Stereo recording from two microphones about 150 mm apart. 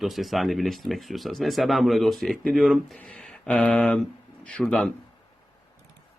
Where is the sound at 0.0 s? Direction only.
Centre (ahead or behind).